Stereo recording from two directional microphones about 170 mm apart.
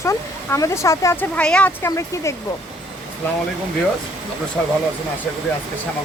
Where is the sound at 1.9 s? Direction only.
15° left (ahead or behind).